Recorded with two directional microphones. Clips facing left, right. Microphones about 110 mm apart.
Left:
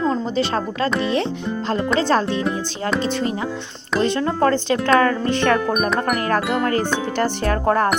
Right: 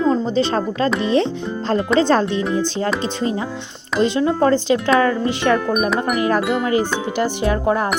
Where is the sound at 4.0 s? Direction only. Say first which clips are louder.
Right 2 dB; 15° right (ahead or behind).